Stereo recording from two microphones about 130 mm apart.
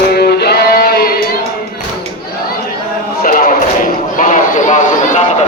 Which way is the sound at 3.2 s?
90° left.